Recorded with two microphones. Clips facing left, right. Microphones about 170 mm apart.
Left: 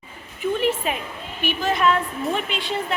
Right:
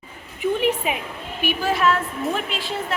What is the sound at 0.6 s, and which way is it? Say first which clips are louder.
A woman's voice: right 1 dB; 15° right (ahead or behind).